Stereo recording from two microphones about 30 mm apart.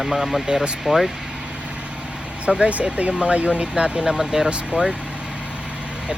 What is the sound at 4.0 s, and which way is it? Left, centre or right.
Speech, centre.